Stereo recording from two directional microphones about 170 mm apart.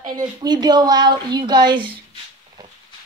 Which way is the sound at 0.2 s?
25° right (ahead or behind).